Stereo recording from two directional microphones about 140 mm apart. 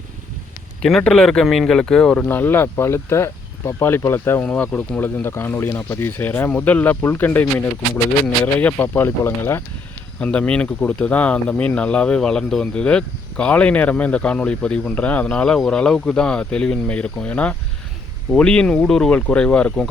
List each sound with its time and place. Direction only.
0.8 s speech: 5° left (ahead or behind)